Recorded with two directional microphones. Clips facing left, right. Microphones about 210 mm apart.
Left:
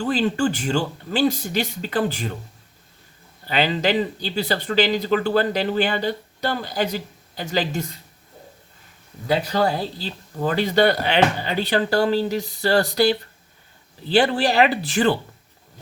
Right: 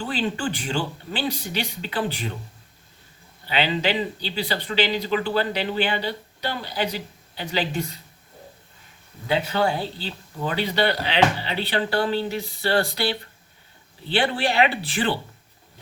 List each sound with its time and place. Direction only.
0.0 s speech: 40° left (ahead or behind)
3.4 s speech: 45° left (ahead or behind)
9.2 s speech: 40° left (ahead or behind)